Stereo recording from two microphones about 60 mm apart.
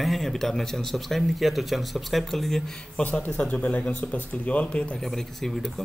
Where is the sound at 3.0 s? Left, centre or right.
Left.